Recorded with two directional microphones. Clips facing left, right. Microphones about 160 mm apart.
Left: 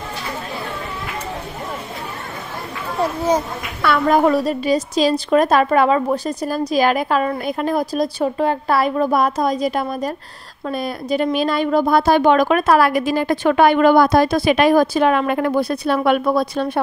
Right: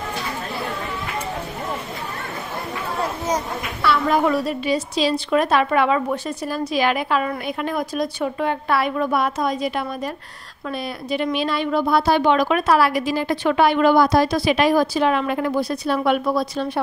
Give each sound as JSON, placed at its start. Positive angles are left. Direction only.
{"t": 3.8, "sound": "a woman's voice", "side_deg": 50}